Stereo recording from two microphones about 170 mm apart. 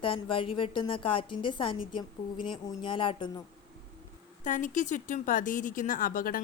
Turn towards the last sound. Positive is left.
turn(degrees=55)  # may be behind; listen again after turning